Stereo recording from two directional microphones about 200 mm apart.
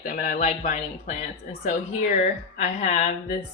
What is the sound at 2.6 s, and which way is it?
Speech, 35° left (ahead or behind).